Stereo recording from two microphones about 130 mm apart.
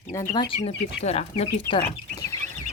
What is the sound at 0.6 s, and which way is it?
Speech, 55° left (ahead or behind).